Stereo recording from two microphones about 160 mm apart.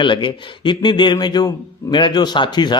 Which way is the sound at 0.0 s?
30° left (ahead or behind).